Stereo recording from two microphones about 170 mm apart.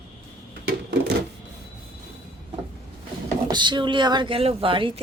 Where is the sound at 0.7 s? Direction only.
80° right.